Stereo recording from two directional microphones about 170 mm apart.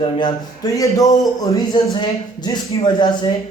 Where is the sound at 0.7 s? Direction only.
20° left (ahead or behind).